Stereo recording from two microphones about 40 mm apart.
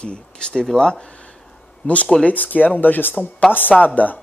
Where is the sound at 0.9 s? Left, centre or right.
Left.